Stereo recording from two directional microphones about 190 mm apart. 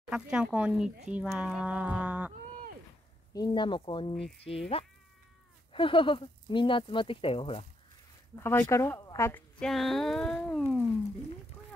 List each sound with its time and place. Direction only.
0.1 s speech: 5° right (ahead or behind)
3.3 s speech: 20° left (ahead or behind)
4.4 s insect: 30° left (ahead or behind)
5.7 s speech: 25° left (ahead or behind)
8.4 s speech: 10° left (ahead or behind)
9.6 s speech: centre (ahead or behind)